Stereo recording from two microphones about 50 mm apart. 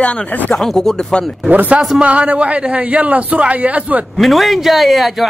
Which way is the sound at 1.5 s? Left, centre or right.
Right.